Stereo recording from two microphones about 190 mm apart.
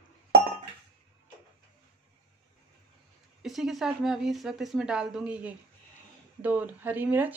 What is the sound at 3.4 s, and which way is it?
Speech, centre (ahead or behind).